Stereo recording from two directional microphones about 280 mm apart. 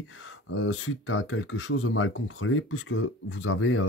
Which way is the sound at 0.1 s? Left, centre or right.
Left.